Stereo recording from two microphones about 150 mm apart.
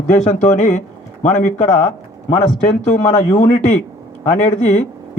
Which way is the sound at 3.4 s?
60° left (ahead or behind).